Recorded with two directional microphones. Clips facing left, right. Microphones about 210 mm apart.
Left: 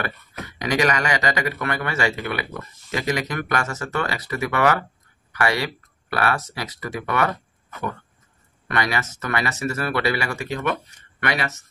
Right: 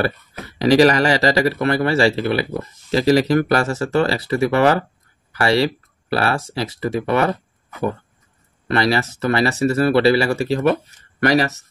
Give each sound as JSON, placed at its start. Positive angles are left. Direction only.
{"t": 0.0, "sound": "speech", "side_deg": -35}
{"t": 8.6, "sound": "speech", "side_deg": -30}